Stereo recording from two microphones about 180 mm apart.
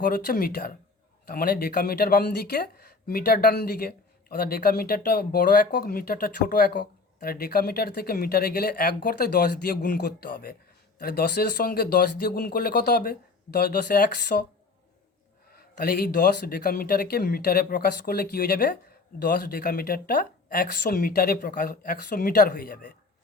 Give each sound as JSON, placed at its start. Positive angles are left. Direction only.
{"t": 0.0, "sound": "speech", "side_deg": 55}
{"t": 15.5, "sound": "speech", "side_deg": 60}